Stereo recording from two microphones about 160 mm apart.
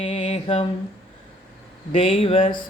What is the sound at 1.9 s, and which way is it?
Mantra, 35° left (ahead or behind).